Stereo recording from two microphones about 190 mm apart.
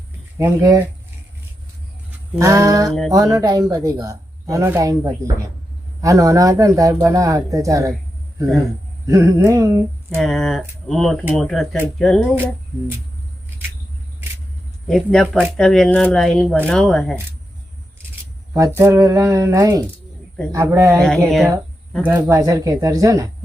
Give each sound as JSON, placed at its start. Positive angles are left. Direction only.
{"t": 0.3, "sound": "speech", "side_deg": -15}
{"t": 2.4, "sound": "speech", "side_deg": -15}
{"t": 9.0, "sound": "speech", "side_deg": -15}
{"t": 10.2, "sound": "speech", "side_deg": 0}
{"t": 14.8, "sound": "speech", "side_deg": 0}
{"t": 18.5, "sound": "speech", "side_deg": -15}
{"t": 21.2, "sound": "speech", "side_deg": 0}
{"t": 22.0, "sound": "speech", "side_deg": -10}